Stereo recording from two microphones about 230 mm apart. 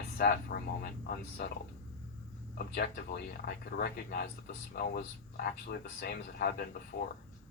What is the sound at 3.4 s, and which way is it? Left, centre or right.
Speech, left.